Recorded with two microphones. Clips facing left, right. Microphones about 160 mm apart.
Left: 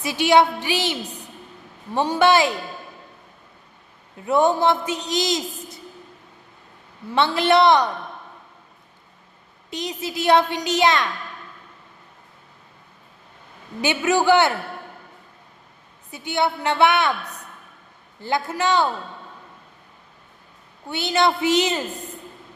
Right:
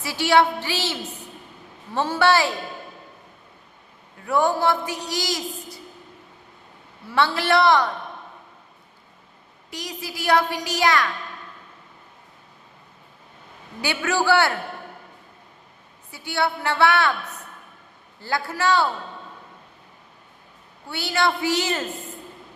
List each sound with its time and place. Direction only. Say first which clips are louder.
0.0 s a woman's voice: left 2 dB; 20° left (ahead or behind)
4.3 s a man's voice: left 3 dB; 20° left (ahead or behind)
7.1 s a man's voice: left 2 dB; 20° left (ahead or behind)
9.6 s a man's voice: left 5 dB; 25° left (ahead or behind)
13.8 s a man's voice: left 4 dB; 20° left (ahead or behind)
16.1 s a man's voice: left 2 dB; 20° left (ahead or behind)
18.2 s a man's voice: left 2 dB; 20° left (ahead or behind)
20.8 s a man's voice: left 3 dB; 20° left (ahead or behind)